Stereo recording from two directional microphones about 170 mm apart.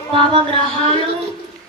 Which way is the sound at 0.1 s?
30° right (ahead or behind).